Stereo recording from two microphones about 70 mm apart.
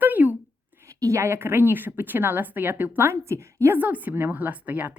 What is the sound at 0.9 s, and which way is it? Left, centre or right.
Speech, right.